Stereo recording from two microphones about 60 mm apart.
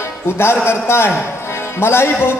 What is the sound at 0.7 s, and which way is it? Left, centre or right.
A man's voice, left.